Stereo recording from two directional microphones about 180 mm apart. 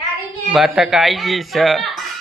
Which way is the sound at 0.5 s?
Centre (ahead or behind).